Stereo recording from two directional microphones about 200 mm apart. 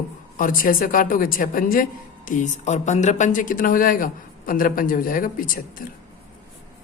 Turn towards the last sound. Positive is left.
turn(degrees=45)  # may be behind; listen again after turning